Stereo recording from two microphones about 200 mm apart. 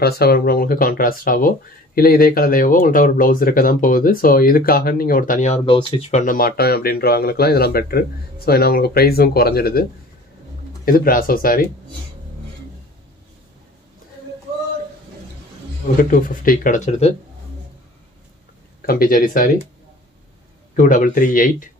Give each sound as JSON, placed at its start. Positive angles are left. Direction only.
{"t": 0.0, "sound": "speech", "side_deg": 50}
{"t": 5.7, "sound": "speech", "side_deg": 25}
{"t": 6.2, "sound": "speech", "side_deg": 45}
{"t": 10.9, "sound": "speech", "side_deg": 45}
{"t": 16.0, "sound": "speech", "side_deg": 45}
{"t": 18.9, "sound": "speech", "side_deg": 45}
{"t": 20.7, "sound": "speech", "side_deg": 40}